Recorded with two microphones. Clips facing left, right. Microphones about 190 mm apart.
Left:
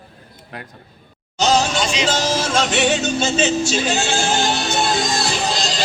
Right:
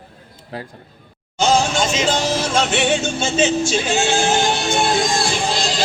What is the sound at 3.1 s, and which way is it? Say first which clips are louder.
Music: even; 15° right (ahead or behind).